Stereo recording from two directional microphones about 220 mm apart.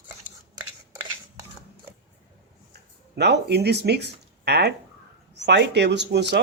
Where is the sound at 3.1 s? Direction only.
50° right (ahead or behind).